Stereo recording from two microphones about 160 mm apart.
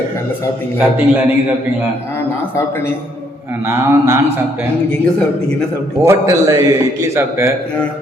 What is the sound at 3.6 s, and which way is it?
A man's voice, 20° right (ahead or behind).